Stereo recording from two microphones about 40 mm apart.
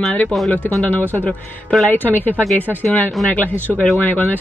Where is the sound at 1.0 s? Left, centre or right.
Right.